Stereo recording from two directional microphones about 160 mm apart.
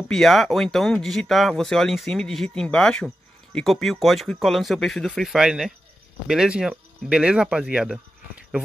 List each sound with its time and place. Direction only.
0.1 s speech: centre (ahead or behind)